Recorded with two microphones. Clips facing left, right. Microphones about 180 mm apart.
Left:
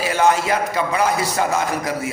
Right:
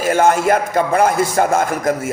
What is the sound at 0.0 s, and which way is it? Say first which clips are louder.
A man's voice: right 4 dB; 50° right (ahead or behind).